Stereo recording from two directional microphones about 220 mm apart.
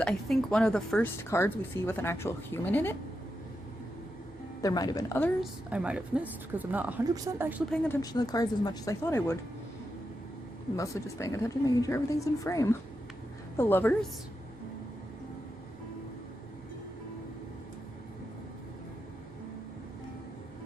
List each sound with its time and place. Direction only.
0.0 s speech: 5° left (ahead or behind)
4.6 s speech: 15° left (ahead or behind)
5.4 s speech: 5° right (ahead or behind)
8.0 s speech: 15° left (ahead or behind)
10.8 s speech: 15° left (ahead or behind)